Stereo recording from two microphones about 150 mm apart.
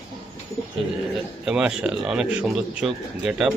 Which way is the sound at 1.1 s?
5° right (ahead or behind).